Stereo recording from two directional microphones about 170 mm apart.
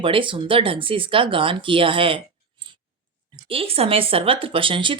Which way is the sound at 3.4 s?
35° right (ahead or behind).